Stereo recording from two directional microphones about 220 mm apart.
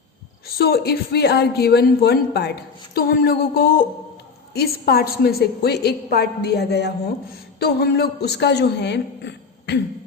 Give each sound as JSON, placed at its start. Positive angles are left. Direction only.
{"t": 0.4, "sound": "a woman's voice", "side_deg": 45}